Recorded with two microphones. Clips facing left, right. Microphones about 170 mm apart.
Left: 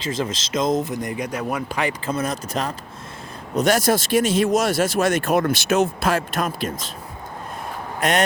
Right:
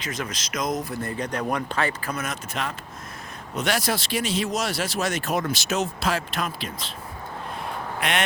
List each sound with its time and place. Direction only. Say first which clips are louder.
0.0 s speech: left 6 dB; 25° left (ahead or behind)
2.0 s speech: left 6 dB; 30° left (ahead or behind)
8.0 s speech: left 6 dB; 40° left (ahead or behind)